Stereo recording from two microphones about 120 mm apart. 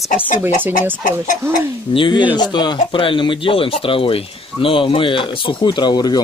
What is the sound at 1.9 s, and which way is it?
Speech, 40° left (ahead or behind).